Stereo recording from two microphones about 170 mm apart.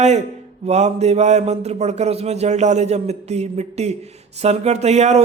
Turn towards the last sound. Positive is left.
turn(degrees=-40)  # may be behind; listen again after turning